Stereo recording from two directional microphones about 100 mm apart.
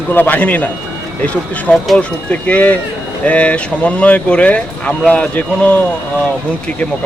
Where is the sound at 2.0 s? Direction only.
15° left (ahead or behind).